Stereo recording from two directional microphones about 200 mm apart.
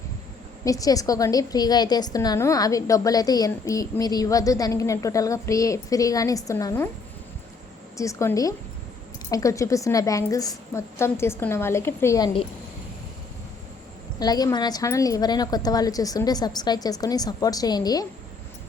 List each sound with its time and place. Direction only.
0.6 s a woman's voice: 15° left (ahead or behind)
7.9 s a woman's voice: 15° left (ahead or behind)
14.2 s a woman's voice: 20° left (ahead or behind)